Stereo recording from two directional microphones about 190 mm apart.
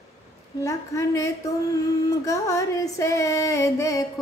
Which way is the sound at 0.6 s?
15° left (ahead or behind).